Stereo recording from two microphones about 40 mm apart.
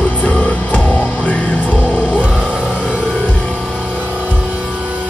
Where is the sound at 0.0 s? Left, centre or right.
Left.